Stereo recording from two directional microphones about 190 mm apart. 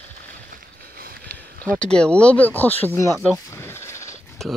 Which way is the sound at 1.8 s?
5° left (ahead or behind).